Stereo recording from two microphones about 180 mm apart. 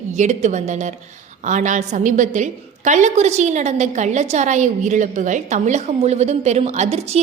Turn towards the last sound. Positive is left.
turn(degrees=-35)  # may be behind; listen again after turning